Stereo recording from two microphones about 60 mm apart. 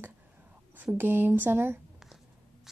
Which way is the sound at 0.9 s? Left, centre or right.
Right.